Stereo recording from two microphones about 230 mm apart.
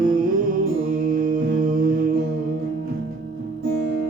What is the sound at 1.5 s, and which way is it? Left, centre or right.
Mantra, right.